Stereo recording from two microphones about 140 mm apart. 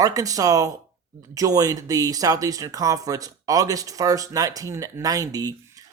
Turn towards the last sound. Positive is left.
turn(degrees=-25)  # may be behind; listen again after turning